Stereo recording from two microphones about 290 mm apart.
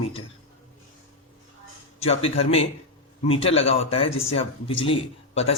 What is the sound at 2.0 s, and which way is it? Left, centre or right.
A man's voice, left.